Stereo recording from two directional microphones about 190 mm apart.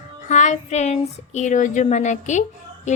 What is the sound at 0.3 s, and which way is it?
A woman's voice, 40° left (ahead or behind).